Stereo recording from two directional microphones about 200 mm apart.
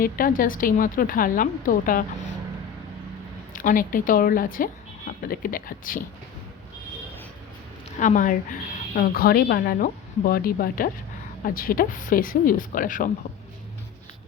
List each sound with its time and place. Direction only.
0.0 s a woman's voice: 45° left (ahead or behind)
3.5 s a woman's voice: 40° left (ahead or behind)
7.9 s a woman's voice: 40° left (ahead or behind)